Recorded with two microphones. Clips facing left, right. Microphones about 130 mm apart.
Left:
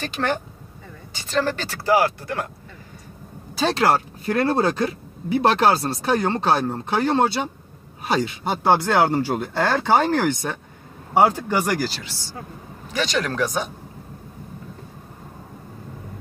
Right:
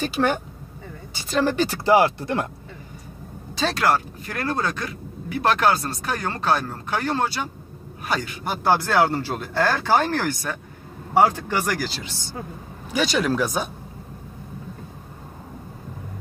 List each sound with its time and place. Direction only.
0.0 s speech: 10° right (ahead or behind); by 2.4 s 25° right (ahead or behind)
3.7 s speech: 30° left (ahead or behind); by 11.9 s 10° left (ahead or behind)
12.0 s speech: 20° right (ahead or behind)
12.9 s speech: 10° right (ahead or behind)